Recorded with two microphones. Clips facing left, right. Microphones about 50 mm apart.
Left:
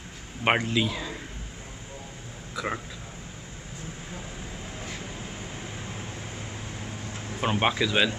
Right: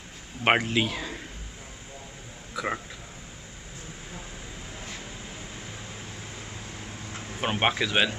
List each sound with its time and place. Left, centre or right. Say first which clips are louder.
0.4 s a man's voice: right 1 dB; centre
2.5 s speech: right 1 dB; centre
7.1 s a sound: even; centre
7.4 s speech: left 1 dB; centre